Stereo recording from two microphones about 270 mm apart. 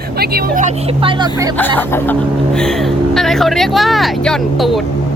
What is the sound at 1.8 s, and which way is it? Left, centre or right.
Chuckle, centre.